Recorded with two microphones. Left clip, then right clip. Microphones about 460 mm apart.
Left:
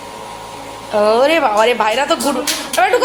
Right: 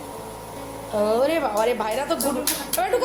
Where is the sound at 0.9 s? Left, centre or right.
Right.